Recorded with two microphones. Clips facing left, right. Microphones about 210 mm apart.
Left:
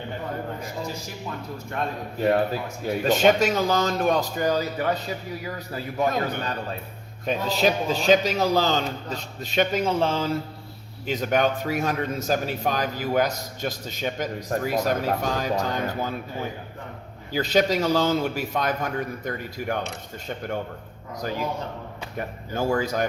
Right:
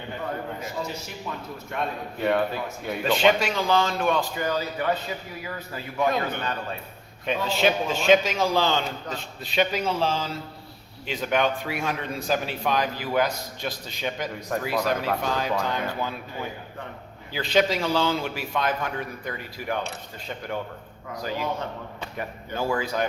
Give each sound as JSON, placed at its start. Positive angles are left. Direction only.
{"t": 2.2, "sound": "a man's voice", "side_deg": 35}
{"t": 21.2, "sound": "a man's voice", "side_deg": 45}